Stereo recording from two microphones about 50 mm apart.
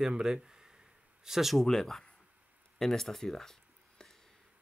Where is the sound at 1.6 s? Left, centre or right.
Centre.